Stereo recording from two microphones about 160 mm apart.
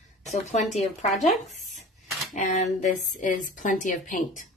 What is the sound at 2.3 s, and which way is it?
Speech, 50° left (ahead or behind).